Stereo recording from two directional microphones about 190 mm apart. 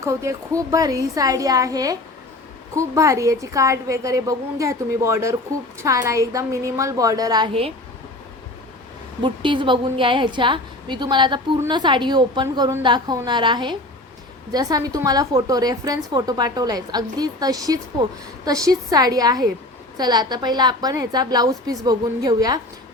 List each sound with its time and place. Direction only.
0.0 s a woman's voice: 15° right (ahead or behind)
9.2 s a woman's voice: 25° right (ahead or behind)